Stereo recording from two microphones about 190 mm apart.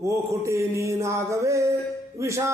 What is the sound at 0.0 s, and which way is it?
A man's voice, 15° right (ahead or behind).